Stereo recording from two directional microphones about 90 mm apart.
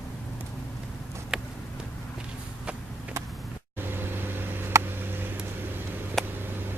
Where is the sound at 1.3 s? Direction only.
5° right (ahead or behind).